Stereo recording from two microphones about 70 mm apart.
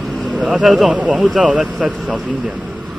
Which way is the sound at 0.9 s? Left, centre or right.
Centre.